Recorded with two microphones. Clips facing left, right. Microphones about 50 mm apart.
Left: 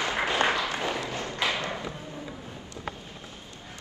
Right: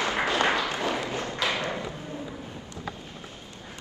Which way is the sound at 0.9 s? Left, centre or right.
Right.